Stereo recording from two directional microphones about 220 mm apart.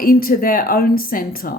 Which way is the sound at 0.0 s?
40° left (ahead or behind).